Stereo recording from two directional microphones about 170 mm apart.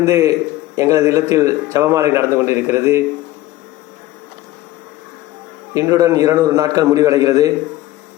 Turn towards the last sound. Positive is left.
turn(degrees=-20)  # may be behind; listen again after turning